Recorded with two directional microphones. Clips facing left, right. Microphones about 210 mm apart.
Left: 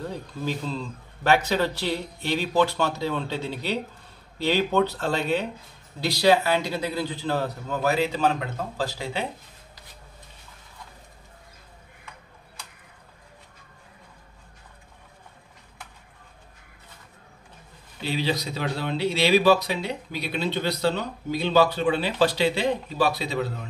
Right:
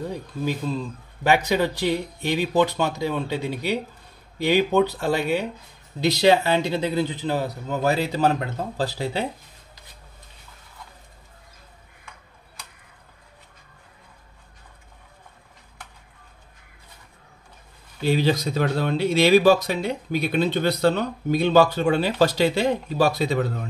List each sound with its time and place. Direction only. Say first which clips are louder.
0.0 s a man's voice: right 3 dB; 15° right (ahead or behind)
5.9 s a man's voice: right 2 dB; 20° right (ahead or behind)
7.8 s a man's voice: right 2 dB; 35° right (ahead or behind)
18.0 s speech: right 6 dB; 45° right (ahead or behind)